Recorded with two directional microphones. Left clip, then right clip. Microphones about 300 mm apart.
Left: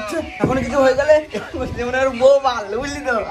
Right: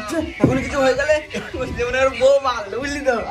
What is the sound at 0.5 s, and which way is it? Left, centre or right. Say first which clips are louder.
A man's voice: left 4 dB; left.